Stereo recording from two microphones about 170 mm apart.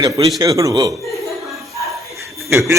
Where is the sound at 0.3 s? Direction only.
20° right (ahead or behind).